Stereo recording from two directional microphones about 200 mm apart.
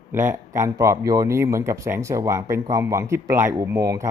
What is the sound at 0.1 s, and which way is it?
Speech, 10° right (ahead or behind).